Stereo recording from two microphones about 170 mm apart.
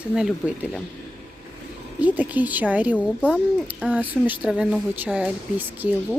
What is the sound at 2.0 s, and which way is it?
Speech, 10° right (ahead or behind).